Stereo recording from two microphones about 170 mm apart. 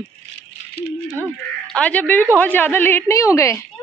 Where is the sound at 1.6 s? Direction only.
5° left (ahead or behind).